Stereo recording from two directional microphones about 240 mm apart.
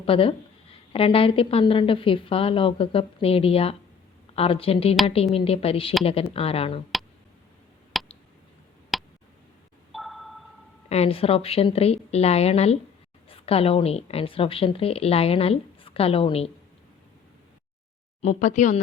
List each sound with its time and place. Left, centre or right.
0.0 s speech: left
7.9 s a sound: centre
8.9 s tick: centre
9.9 s sonar: centre
10.8 s speech: left
18.2 s speech: left